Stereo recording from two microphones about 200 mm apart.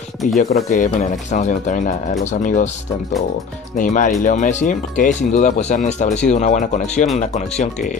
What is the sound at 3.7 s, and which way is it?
Speech, 40° left (ahead or behind).